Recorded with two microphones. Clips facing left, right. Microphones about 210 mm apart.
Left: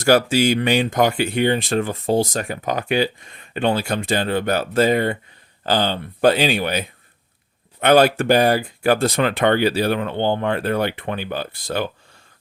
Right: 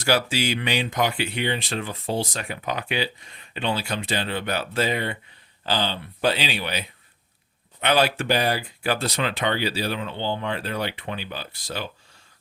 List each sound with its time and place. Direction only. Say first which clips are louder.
0.0 s speech: left 8 dB; 45° left (ahead or behind)